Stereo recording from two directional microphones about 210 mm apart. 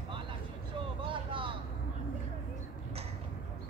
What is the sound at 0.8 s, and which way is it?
Vehicle, 25° right (ahead or behind).